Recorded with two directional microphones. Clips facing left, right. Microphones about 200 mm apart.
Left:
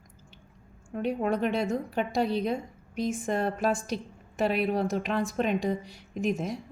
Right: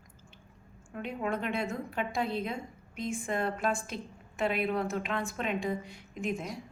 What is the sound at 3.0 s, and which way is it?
A woman's voice, 40° left (ahead or behind).